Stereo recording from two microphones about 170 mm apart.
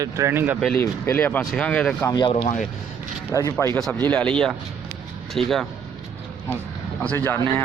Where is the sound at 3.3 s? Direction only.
15° left (ahead or behind); by 5.6 s centre (ahead or behind).